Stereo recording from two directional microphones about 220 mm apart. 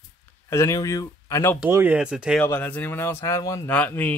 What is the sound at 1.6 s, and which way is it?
Speech, 10° right (ahead or behind).